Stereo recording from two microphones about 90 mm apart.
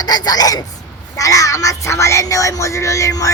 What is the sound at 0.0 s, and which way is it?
A woman's voice, 45° left (ahead or behind).